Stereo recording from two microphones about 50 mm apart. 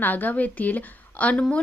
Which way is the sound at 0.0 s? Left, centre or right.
Left.